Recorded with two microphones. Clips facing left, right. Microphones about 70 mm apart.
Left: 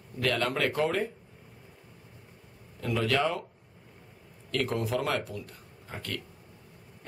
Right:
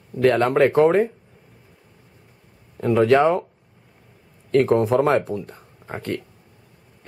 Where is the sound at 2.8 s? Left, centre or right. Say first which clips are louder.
Right 12 dB; right.